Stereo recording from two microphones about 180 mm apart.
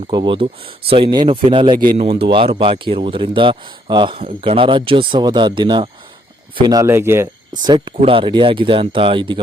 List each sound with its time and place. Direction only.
0.1 s a man's voice: 25° right (ahead or behind)
7.9 s a man's voice: 30° right (ahead or behind)